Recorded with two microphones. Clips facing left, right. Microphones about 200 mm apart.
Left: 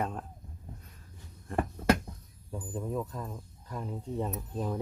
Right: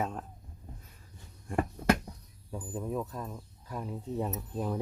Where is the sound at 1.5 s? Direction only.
15° right (ahead or behind).